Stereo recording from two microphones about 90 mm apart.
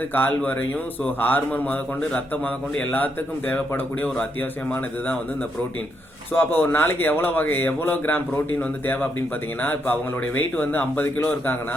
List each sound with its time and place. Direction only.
0.1 s a man's voice: 20° left (ahead or behind)
6.3 s a man's voice: 25° left (ahead or behind)